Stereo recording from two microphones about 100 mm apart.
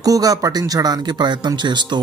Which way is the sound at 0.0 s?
35° right (ahead or behind).